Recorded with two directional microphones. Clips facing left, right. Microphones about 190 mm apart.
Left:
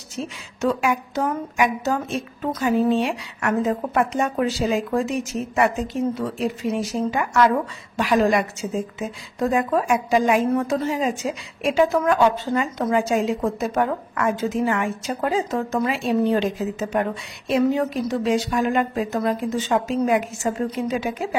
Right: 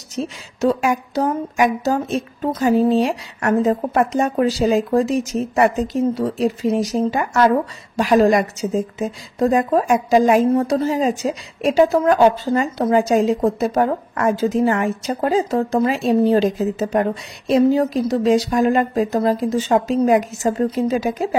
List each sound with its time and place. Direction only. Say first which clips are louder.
0.1 s a woman's voice: right 5 dB; 35° right (ahead or behind)